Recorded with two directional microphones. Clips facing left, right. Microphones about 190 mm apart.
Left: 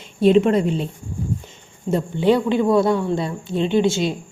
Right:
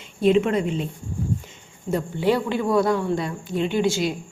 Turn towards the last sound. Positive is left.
turn(degrees=25)  # may be behind; listen again after turning